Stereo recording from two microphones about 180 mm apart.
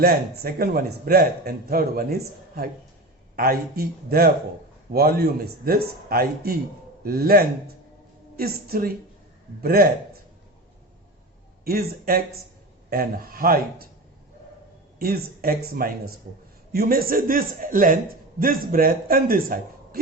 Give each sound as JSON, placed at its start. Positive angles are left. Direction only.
{"t": 0.0, "sound": "a man's voice", "side_deg": -60}
{"t": 11.6, "sound": "a man's voice", "side_deg": -55}
{"t": 14.9, "sound": "a man's voice", "side_deg": -60}